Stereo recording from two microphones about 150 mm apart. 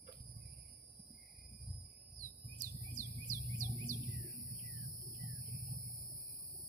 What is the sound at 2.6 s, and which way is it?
Bird, 60° right (ahead or behind).